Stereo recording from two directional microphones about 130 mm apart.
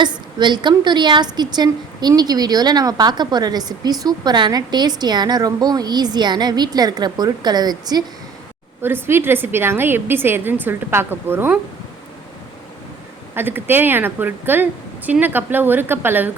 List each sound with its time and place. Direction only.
0.0 s a woman's voice: 35° right (ahead or behind)
8.8 s a woman's voice: 15° right (ahead or behind)
13.3 s a woman's voice: 15° right (ahead or behind)